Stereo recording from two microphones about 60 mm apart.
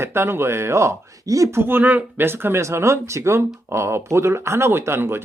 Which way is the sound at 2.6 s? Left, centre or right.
Right.